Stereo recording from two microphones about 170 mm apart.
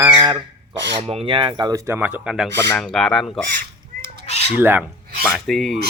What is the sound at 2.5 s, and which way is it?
Speech, 15° left (ahead or behind).